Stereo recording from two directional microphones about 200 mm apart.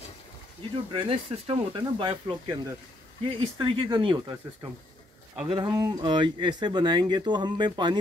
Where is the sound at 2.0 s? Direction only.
25° right (ahead or behind).